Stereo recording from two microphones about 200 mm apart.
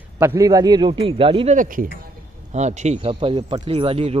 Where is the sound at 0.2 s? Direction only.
15° right (ahead or behind).